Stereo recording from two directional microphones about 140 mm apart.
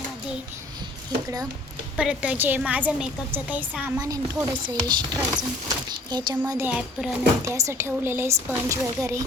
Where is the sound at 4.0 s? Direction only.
25° right (ahead or behind).